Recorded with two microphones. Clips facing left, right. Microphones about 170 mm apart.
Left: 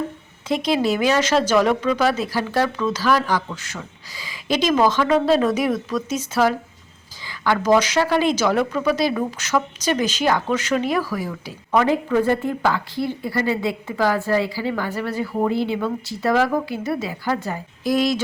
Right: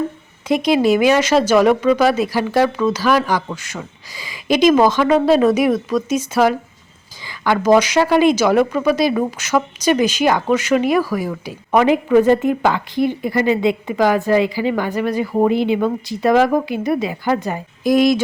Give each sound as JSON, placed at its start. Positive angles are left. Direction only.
{"t": 0.4, "sound": "a woman's voice", "side_deg": -15}